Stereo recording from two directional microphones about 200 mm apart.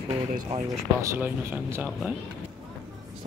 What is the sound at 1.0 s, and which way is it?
Speech, 10° right (ahead or behind).